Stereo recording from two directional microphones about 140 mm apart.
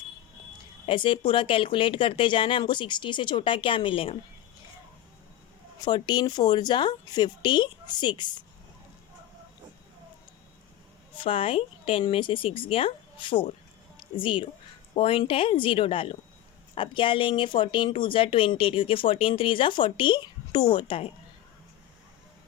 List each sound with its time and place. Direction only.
0.9 s speech: 35° left (ahead or behind)
5.8 s speech: 30° left (ahead or behind)
11.2 s speech: 40° left (ahead or behind)